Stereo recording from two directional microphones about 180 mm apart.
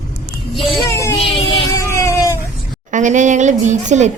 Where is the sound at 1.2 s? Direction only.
30° left (ahead or behind).